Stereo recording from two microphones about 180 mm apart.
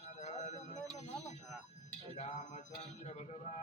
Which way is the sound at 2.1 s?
40° left (ahead or behind).